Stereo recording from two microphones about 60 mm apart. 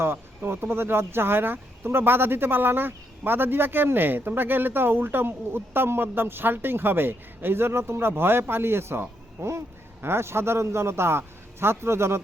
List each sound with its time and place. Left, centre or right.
0.0 s speech: right